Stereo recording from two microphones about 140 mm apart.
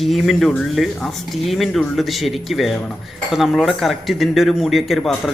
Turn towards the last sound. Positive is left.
turn(degrees=0)  # may be behind; listen again after turning